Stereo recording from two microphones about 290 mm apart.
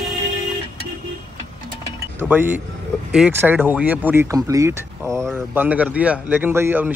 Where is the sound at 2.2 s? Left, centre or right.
Centre.